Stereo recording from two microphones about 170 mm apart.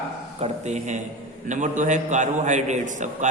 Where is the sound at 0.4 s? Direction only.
40° right (ahead or behind).